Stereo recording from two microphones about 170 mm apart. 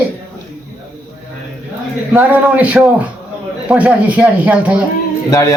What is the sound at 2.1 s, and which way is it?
Speech, 10° right (ahead or behind).